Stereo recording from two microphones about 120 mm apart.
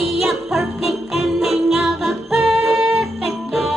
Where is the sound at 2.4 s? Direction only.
20° right (ahead or behind).